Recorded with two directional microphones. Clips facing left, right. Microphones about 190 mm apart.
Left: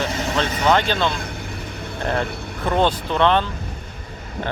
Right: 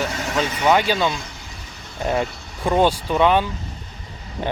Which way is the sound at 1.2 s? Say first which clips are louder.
Left 6 dB; 55° left (ahead or behind).